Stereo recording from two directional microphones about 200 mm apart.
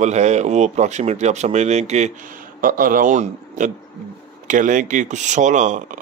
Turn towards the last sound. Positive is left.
turn(degrees=-40)  # may be behind; listen again after turning